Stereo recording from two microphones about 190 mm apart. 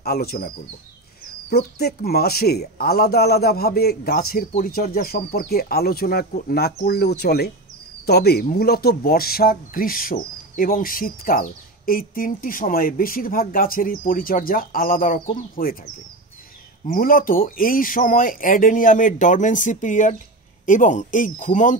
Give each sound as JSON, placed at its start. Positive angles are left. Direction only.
{"t": 0.0, "sound": "speech", "side_deg": 55}
{"t": 1.5, "sound": "speech", "side_deg": 55}